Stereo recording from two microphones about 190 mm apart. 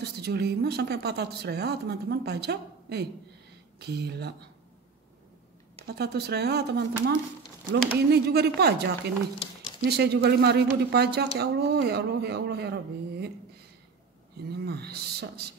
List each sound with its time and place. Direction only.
0.0 s speech: 60° right (ahead or behind)
5.9 s speech: 60° right (ahead or behind)
14.5 s speech: 55° right (ahead or behind)